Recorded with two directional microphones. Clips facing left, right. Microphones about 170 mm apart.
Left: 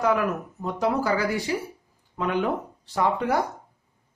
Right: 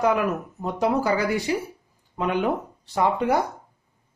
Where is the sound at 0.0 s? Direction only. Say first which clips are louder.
Right 1 dB; 20° right (ahead or behind).